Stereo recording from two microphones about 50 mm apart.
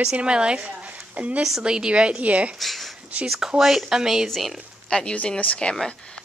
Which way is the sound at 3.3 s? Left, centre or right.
Centre.